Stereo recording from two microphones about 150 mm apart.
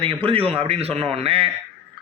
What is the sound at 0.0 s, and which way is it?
Speech, 35° right (ahead or behind).